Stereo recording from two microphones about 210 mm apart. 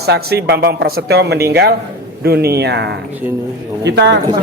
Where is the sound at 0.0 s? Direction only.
50° right (ahead or behind).